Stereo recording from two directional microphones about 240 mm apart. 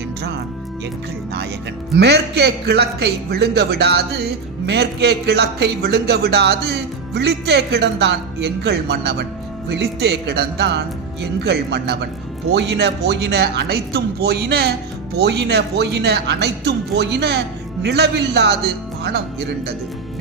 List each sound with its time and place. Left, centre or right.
2.0 s a man's voice: right